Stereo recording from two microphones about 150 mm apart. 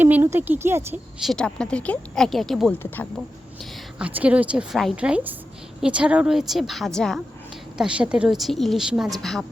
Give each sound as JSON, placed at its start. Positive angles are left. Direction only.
{"t": 0.0, "sound": "speech", "side_deg": -15}
{"t": 1.2, "sound": "a woman's voice", "side_deg": 5}
{"t": 2.7, "sound": "speech", "side_deg": 15}
{"t": 3.6, "sound": "a woman's voice", "side_deg": -10}